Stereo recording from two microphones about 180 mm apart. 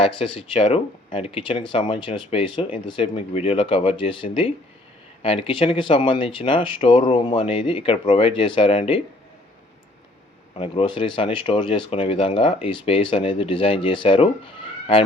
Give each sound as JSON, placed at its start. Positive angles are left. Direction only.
{"t": 0.0, "sound": "speech", "side_deg": 30}
{"t": 10.5, "sound": "speech", "side_deg": 30}